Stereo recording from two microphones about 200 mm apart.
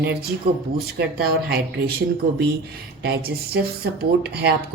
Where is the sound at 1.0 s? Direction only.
50° right (ahead or behind).